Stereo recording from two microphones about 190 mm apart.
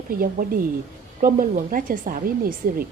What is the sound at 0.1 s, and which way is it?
A woman's voice, 50° right (ahead or behind).